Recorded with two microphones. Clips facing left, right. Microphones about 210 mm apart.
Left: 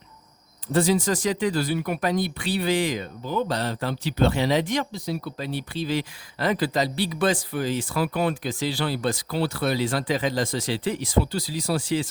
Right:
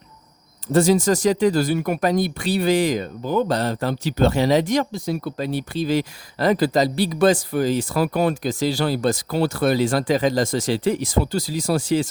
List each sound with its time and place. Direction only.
0.7 s speech: 45° right (ahead or behind)